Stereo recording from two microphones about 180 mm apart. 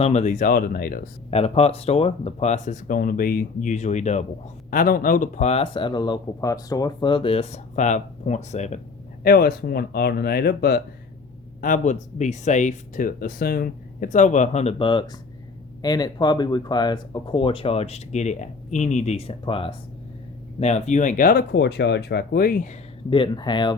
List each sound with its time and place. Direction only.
0.0 s speech: 40° left (ahead or behind)
1.3 s speech: 35° left (ahead or behind)
4.7 s speech: 50° left (ahead or behind)
9.2 s speech: 55° left (ahead or behind)
11.6 s speech: 45° left (ahead or behind)
21.5 s speech: 70° left (ahead or behind); by 22.8 s 45° left (ahead or behind)
23.0 s speech: 30° left (ahead or behind)